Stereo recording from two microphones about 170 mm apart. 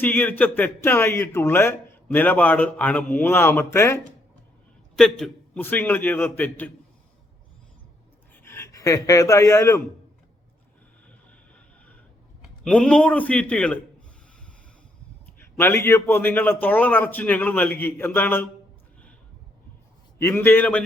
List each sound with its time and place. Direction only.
0.0 s speech: 10° left (ahead or behind)
4.9 s speech: 5° left (ahead or behind)
8.4 s speech: 15° left (ahead or behind)
11.3 s a sound: 10° left (ahead or behind)
12.6 s a man's voice: 5° left (ahead or behind)
15.4 s speech: 15° left (ahead or behind)
20.1 s speech: 15° left (ahead or behind)